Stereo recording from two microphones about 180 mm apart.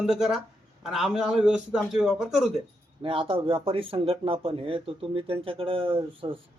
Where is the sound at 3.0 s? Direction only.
30° right (ahead or behind).